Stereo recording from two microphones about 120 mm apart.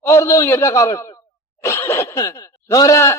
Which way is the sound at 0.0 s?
25° left (ahead or behind).